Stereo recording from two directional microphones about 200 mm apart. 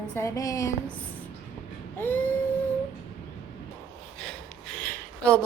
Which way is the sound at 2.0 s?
10° left (ahead or behind).